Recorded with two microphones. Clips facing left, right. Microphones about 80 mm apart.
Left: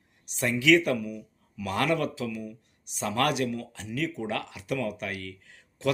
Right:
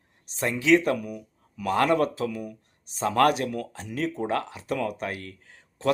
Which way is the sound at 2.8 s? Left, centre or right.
Right.